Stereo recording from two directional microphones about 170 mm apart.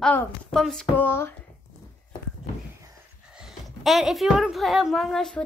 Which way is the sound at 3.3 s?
Centre (ahead or behind).